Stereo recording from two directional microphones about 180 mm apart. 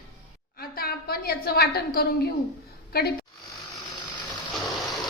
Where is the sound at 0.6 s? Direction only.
55° left (ahead or behind).